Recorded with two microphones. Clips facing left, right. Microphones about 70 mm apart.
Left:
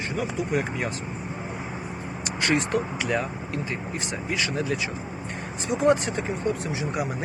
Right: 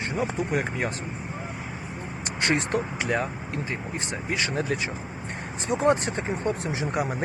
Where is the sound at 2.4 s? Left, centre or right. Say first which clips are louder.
Left 1 dB; right.